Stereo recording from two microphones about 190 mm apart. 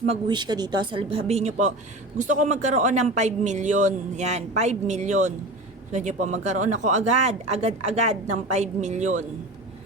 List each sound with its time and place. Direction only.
0.0 s speech: 30° right (ahead or behind)